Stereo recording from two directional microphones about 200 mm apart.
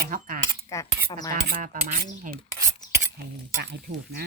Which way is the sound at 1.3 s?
40° right (ahead or behind).